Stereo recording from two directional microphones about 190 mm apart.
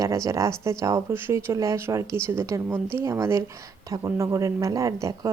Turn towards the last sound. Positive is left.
turn(degrees=-15)  # may be behind; listen again after turning